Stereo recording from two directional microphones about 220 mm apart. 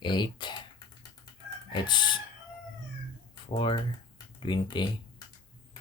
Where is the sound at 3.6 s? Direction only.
20° left (ahead or behind).